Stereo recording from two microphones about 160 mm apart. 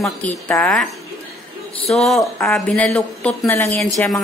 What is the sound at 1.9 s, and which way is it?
A woman's voice, centre (ahead or behind).